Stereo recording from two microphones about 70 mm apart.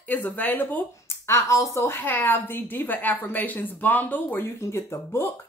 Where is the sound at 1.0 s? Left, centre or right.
Left.